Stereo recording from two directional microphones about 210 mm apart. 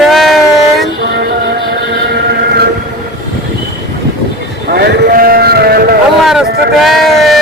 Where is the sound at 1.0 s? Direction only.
50° right (ahead or behind).